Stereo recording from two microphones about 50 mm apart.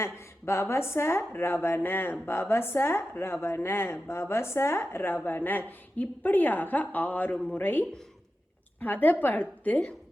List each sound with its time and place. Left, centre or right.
0.0 s a woman's voice: left